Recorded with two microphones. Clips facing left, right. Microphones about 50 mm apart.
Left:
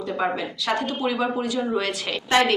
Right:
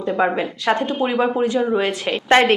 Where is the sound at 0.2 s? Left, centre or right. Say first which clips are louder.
Right 5 dB; right.